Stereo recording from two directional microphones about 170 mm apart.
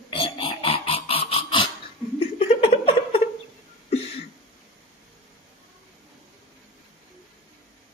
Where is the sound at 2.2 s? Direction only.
35° left (ahead or behind).